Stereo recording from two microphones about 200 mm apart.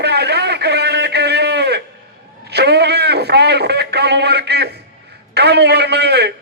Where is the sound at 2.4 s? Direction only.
55° right (ahead or behind).